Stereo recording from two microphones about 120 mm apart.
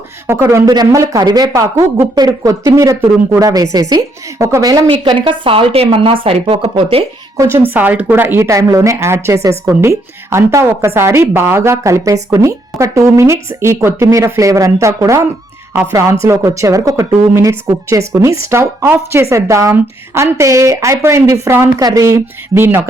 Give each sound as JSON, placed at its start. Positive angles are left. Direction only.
{"t": 0.3, "sound": "a woman's voice", "side_deg": -25}
{"t": 4.9, "sound": "a woman's voice", "side_deg": -45}
{"t": 7.3, "sound": "a woman's voice", "side_deg": -20}